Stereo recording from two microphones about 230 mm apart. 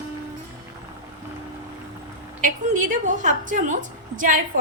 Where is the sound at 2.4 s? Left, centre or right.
Right.